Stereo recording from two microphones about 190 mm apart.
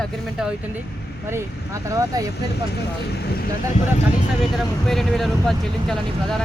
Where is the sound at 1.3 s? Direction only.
15° right (ahead or behind).